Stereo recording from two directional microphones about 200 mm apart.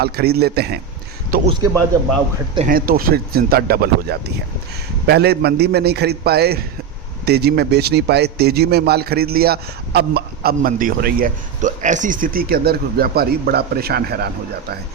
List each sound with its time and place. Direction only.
0.0 s a man's voice: 50° right (ahead or behind)
2.6 s a man's voice: 45° right (ahead or behind)